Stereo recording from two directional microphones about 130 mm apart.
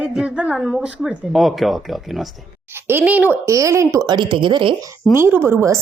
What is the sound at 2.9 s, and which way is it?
A woman's voice, 15° right (ahead or behind).